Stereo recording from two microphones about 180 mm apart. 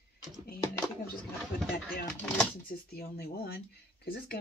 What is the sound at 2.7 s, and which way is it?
Speech, 60° left (ahead or behind).